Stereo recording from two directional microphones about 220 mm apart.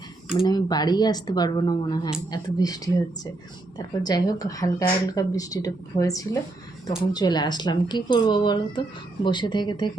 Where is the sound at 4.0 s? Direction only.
20° left (ahead or behind).